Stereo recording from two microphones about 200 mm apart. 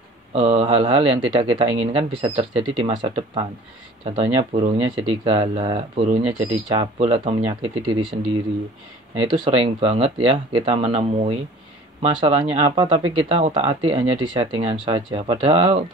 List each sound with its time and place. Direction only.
0.3 s speech: 30° right (ahead or behind)
9.4 s speech: 25° right (ahead or behind)